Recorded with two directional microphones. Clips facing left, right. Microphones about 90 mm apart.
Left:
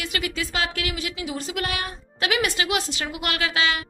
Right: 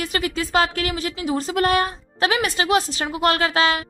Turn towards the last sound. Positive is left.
turn(degrees=-40)  # may be behind; listen again after turning